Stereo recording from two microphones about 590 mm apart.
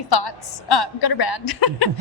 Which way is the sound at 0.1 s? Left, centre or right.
Left.